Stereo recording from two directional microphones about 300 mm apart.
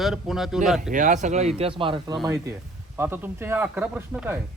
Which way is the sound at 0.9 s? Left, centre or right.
Right.